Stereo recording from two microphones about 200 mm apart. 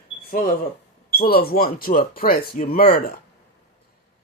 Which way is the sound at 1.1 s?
50° left (ahead or behind).